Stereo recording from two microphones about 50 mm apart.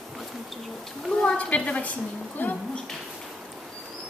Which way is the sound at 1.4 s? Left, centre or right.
Left.